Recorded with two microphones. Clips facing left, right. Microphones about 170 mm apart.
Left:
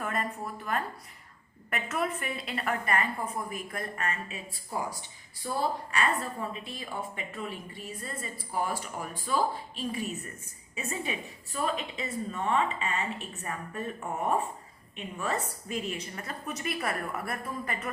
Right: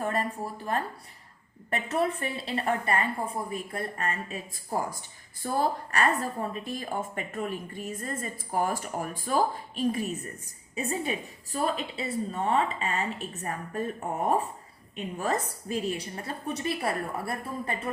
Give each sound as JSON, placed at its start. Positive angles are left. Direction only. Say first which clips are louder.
{"t": 0.0, "sound": "a woman's voice", "louder": "right 3 dB", "side_deg": -30}